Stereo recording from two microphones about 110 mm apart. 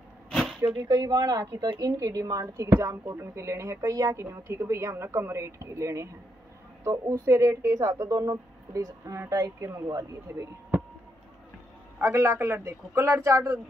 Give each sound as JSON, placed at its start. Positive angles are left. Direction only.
{"t": 0.3, "sound": "a sound", "side_deg": 0}
{"t": 0.6, "sound": "speech", "side_deg": -35}
{"t": 12.0, "sound": "speech", "side_deg": -25}